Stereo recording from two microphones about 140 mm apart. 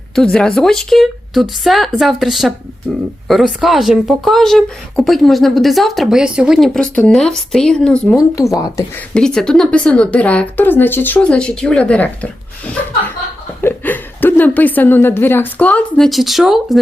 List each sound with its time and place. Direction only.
0.2 s speech: 5° left (ahead or behind)
8.4 s speech: 20° left (ahead or behind)
9.1 s speech: 5° left (ahead or behind)
16.0 s speech: centre (ahead or behind)